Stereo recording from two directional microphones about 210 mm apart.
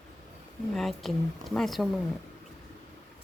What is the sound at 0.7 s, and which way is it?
Speech, centre (ahead or behind).